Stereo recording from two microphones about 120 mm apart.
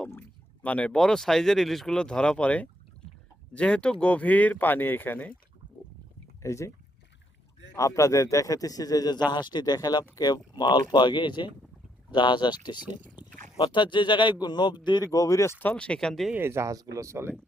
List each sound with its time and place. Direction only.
0.1 s speech: 15° left (ahead or behind)
6.4 s speech: 25° left (ahead or behind)
7.8 s speech: 25° left (ahead or behind)
13.2 s a sound: 10° right (ahead or behind)
13.6 s speech: 35° left (ahead or behind)
15.1 s speech: 25° left (ahead or behind); by 16.3 s 5° left (ahead or behind)
16.3 s speech: 20° right (ahead or behind)